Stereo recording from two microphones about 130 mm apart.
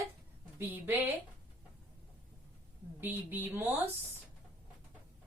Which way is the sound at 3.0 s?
15° right (ahead or behind).